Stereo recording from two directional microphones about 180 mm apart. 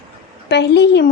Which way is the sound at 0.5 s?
70° left (ahead or behind).